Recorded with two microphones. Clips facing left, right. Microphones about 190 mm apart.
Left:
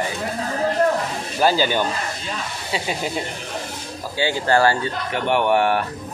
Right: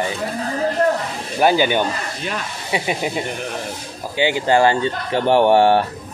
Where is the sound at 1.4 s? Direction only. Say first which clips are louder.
Right 3 dB; 20° right (ahead or behind).